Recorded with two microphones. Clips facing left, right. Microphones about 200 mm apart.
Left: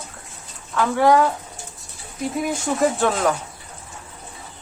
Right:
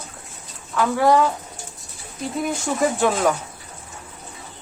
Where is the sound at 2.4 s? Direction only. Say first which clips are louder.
Left 1 dB; centre (ahead or behind).